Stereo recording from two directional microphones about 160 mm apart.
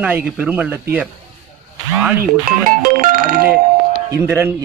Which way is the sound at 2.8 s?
60° right (ahead or behind).